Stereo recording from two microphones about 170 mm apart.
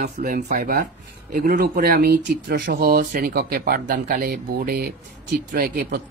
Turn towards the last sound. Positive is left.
turn(degrees=-60)  # may be behind; listen again after turning